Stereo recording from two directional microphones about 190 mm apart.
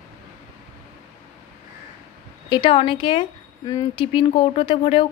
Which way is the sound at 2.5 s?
25° left (ahead or behind).